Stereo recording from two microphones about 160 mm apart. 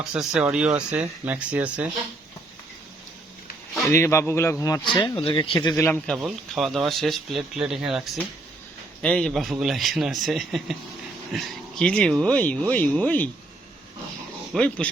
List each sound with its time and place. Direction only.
0.1 s speech: 5° right (ahead or behind)
3.8 s speech: 15° left (ahead or behind)
6.1 s speech: centre (ahead or behind)
9.0 s speech: 5° left (ahead or behind)
14.5 s speech: 5° left (ahead or behind)